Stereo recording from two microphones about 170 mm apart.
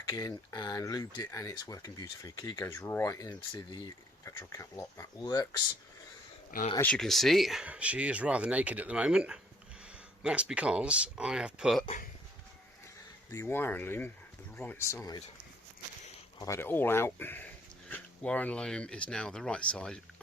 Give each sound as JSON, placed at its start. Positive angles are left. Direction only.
{"t": 0.1, "sound": "speech", "side_deg": 20}
{"t": 6.7, "sound": "speech", "side_deg": 5}
{"t": 13.3, "sound": "speech", "side_deg": 15}
{"t": 16.4, "sound": "speech", "side_deg": 15}